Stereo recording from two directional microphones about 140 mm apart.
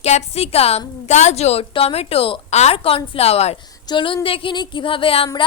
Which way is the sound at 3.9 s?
35° left (ahead or behind).